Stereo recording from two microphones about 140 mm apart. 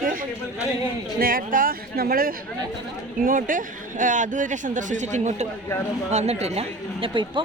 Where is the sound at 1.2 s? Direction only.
85° right.